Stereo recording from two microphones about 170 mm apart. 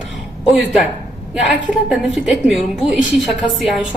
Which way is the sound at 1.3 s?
5° right (ahead or behind).